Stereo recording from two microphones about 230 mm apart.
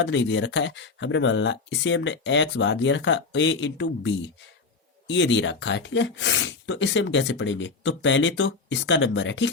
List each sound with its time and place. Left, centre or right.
0.0 s speech: left